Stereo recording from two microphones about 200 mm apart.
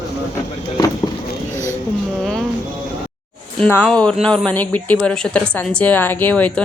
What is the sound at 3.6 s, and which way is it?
Speech, 5° left (ahead or behind).